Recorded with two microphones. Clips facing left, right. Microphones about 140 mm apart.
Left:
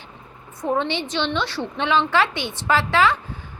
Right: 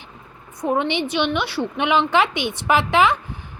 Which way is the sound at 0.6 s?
15° right (ahead or behind).